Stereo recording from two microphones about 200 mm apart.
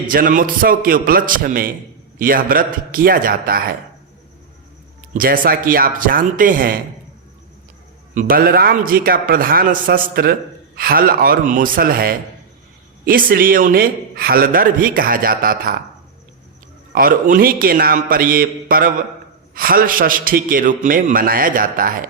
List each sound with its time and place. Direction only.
0.1 s a man's voice: 45° right (ahead or behind)
5.1 s a man's voice: 45° right (ahead or behind)
8.1 s a man's voice: 45° right (ahead or behind)
16.9 s a man's voice: 45° right (ahead or behind)